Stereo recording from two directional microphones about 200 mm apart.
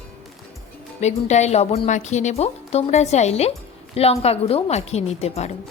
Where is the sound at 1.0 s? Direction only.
35° left (ahead or behind).